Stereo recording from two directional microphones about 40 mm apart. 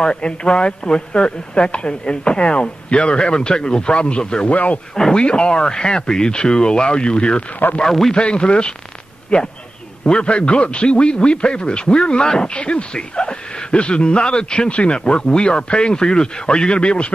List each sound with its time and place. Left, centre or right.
0.0 s a man's voice: left
4.5 s speech: left
5.1 s a man's voice: left
7.8 s a man's voice: centre
8.1 s a man's voice: left